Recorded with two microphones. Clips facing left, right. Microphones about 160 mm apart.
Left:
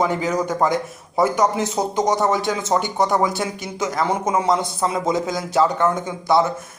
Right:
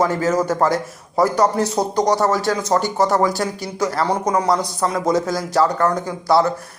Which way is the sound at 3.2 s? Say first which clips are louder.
Right 2 dB; 20° left (ahead or behind).